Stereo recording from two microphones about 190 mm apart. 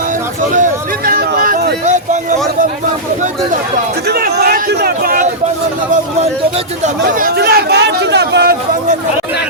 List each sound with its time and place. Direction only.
0.5 s a sound: 45° right (ahead or behind)
4.0 s a man's voice: 55° right (ahead or behind)
7.0 s speech: 50° right (ahead or behind)